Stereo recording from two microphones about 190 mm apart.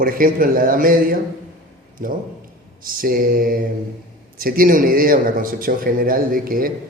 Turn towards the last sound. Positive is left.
turn(degrees=-50)  # may be behind; listen again after turning